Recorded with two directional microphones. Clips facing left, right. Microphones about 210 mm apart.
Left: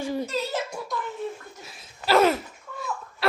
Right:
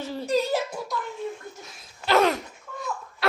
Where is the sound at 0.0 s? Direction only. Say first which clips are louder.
Left 4 dB; 15° left (ahead or behind).